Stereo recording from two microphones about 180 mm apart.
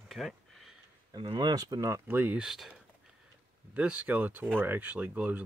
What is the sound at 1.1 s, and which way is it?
Speech, 25° right (ahead or behind).